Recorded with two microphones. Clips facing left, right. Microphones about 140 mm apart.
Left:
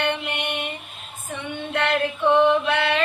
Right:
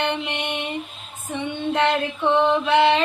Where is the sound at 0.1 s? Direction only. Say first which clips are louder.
Right 1 dB; 25° right (ahead or behind).